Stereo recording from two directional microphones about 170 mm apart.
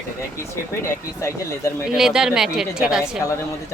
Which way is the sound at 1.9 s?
5° right (ahead or behind).